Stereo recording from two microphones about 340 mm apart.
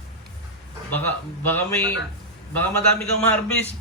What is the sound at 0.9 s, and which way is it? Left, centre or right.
A man's voice, centre.